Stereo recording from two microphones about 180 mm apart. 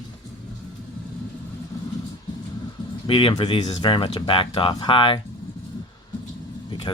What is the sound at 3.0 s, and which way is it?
Speech, 30° left (ahead or behind).